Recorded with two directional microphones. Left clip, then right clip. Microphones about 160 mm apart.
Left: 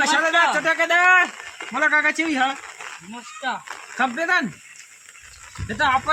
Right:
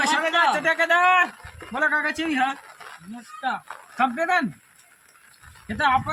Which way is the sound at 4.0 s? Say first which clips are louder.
Left 1 dB; 15° right (ahead or behind).